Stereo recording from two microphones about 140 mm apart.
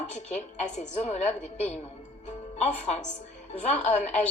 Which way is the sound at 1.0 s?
50° left (ahead or behind).